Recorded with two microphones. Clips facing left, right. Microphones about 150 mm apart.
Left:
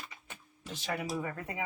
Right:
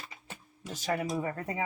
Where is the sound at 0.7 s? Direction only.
40° right (ahead or behind).